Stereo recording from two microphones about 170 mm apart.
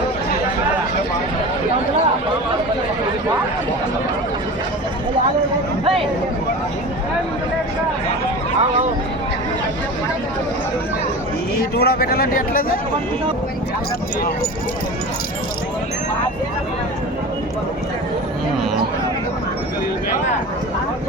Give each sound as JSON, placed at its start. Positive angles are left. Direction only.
{"t": 11.5, "sound": "speech", "side_deg": 65}